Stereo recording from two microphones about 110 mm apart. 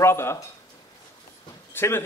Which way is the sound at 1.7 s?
20° left (ahead or behind).